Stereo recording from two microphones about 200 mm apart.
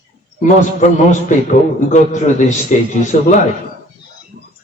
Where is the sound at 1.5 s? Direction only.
35° left (ahead or behind).